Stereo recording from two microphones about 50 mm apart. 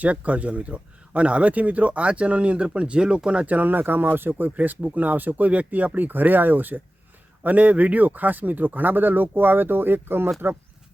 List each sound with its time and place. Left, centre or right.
0.0 s speech: right